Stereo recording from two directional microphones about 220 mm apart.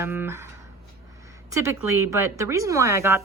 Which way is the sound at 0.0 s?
10° right (ahead or behind).